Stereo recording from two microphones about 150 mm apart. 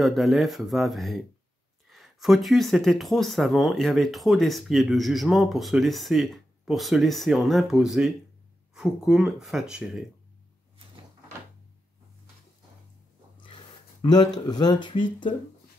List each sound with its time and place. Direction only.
0.0 s speech: centre (ahead or behind)
14.0 s speech: 25° left (ahead or behind)